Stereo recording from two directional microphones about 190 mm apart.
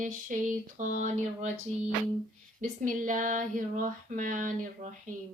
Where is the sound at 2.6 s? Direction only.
45° right (ahead or behind).